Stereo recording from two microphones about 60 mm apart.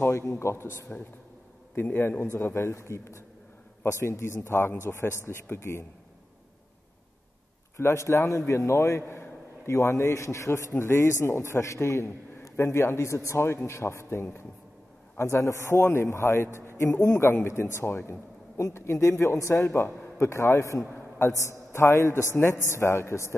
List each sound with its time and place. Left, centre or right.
0.0 s a man's voice: left
2.3 s a man's voice: left
7.7 s a man's voice: left
19.6 s a man's voice: left
20.2 s a man's voice: left